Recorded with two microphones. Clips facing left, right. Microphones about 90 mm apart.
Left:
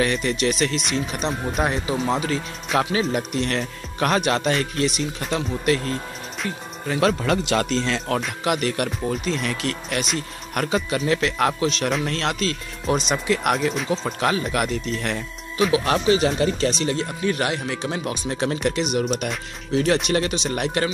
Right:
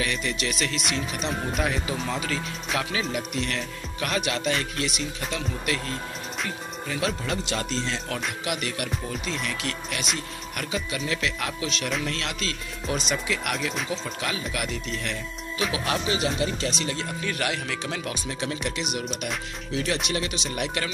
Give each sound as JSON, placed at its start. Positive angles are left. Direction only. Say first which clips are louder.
{"t": 0.0, "sound": "speech", "louder": "left 7 dB", "side_deg": 40}
{"t": 6.9, "sound": "speech", "louder": "left 8 dB", "side_deg": 55}
{"t": 8.5, "sound": "speech", "louder": "left 9 dB", "side_deg": 45}
{"t": 18.3, "sound": "speech", "louder": "left 9 dB", "side_deg": 40}